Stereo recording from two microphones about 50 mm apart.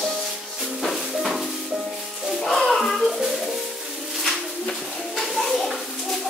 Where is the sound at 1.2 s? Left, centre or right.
Centre.